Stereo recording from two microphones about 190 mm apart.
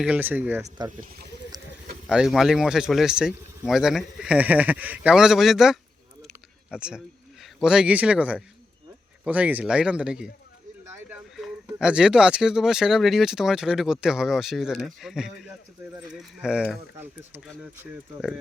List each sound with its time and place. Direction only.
0.0 s speech: 10° right (ahead or behind)
0.9 s speech: 50° right (ahead or behind)
1.5 s a sound: 20° right (ahead or behind)
2.0 s speech: centre (ahead or behind)
6.2 s a sound: 5° right (ahead or behind)
7.4 s a man's voice: 5° right (ahead or behind)
11.3 s speech: 5° right (ahead or behind)